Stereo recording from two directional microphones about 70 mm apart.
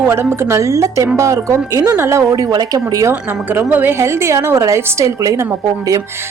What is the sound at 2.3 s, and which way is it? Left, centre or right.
Speech, right.